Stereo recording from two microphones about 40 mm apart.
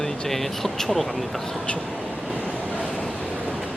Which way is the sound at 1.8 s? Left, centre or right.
Right.